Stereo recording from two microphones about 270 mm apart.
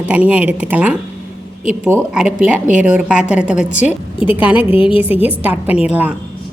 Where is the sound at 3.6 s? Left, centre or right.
Left.